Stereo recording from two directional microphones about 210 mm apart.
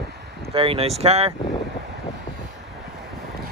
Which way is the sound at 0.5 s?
25° right (ahead or behind).